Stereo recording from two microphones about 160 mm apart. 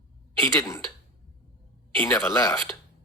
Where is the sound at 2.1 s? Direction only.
20° left (ahead or behind).